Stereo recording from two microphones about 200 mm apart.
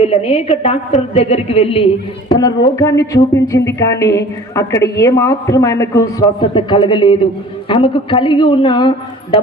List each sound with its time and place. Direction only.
0.0 s a woman's voice: 30° left (ahead or behind)
2.7 s a man's voice: 15° left (ahead or behind)